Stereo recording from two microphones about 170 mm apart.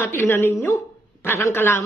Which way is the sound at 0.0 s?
15° left (ahead or behind).